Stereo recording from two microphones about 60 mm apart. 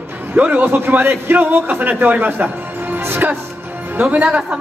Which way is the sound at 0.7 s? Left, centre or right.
Right.